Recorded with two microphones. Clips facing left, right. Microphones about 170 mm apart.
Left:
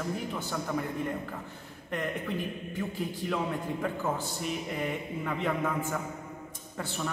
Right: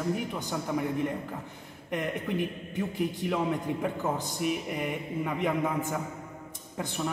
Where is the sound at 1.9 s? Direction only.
15° right (ahead or behind).